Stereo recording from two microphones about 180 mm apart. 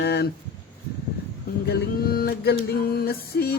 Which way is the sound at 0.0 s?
70° left (ahead or behind).